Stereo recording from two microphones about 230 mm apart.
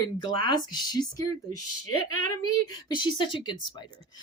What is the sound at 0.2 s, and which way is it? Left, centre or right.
Speech, centre.